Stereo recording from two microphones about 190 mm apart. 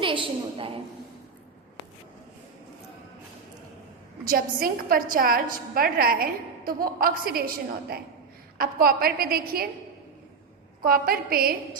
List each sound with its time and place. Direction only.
0.0 s a woman's voice: 25° right (ahead or behind)
4.3 s a woman's voice: 50° right (ahead or behind)
10.8 s a woman's voice: 50° right (ahead or behind)